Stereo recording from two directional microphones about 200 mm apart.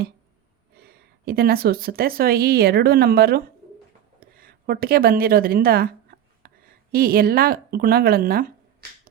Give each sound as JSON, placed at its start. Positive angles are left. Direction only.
{"t": 0.8, "sound": "speech", "side_deg": -50}
{"t": 4.2, "sound": "a sound", "side_deg": -50}
{"t": 6.9, "sound": "speech", "side_deg": -50}